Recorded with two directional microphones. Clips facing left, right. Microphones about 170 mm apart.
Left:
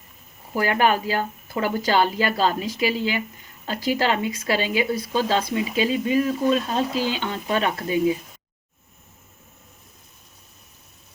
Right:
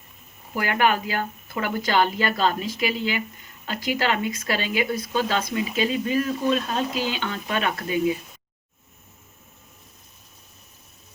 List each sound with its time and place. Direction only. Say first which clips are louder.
0.5 s speech: left 2 dB; 35° left (ahead or behind)